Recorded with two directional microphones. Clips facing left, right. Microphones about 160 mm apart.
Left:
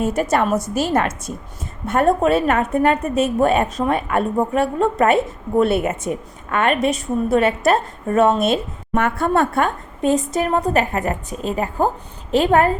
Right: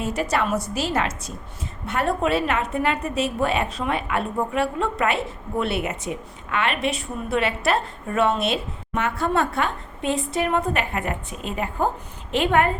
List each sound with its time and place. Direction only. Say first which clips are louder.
0.0 s a woman's voice: left 5 dB; 50° left (ahead or behind)